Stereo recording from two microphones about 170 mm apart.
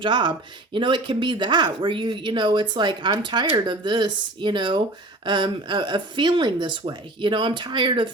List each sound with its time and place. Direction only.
0.0 s speech: 30° right (ahead or behind)